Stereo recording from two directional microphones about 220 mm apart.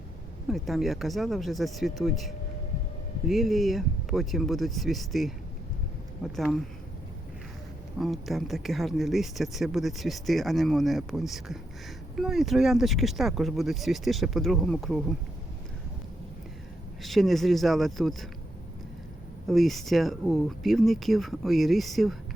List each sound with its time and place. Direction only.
0.4 s speech: centre (ahead or behind)
7.9 s speech: centre (ahead or behind)
17.0 s speech: centre (ahead or behind)
19.5 s speech: centre (ahead or behind)